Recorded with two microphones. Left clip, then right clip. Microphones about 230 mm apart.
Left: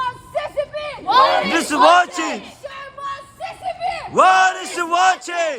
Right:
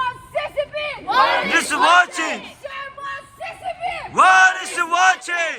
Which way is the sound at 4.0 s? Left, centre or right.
Centre.